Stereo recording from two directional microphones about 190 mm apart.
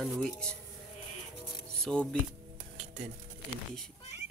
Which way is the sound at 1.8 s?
5° left (ahead or behind).